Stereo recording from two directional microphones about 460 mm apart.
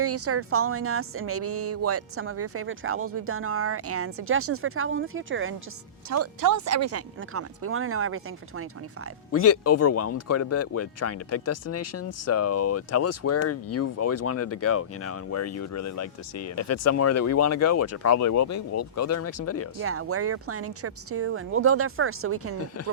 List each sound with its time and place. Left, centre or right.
0.0 s speech: right
6.1 s speech: right
9.3 s speech: left
19.8 s speech: right